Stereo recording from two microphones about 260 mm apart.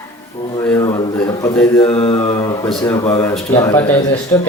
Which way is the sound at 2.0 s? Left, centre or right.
Left.